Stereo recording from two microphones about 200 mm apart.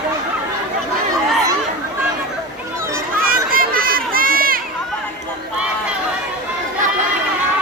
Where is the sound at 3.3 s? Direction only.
45° right (ahead or behind).